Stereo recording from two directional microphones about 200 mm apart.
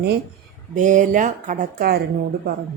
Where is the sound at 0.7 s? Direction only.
40° right (ahead or behind).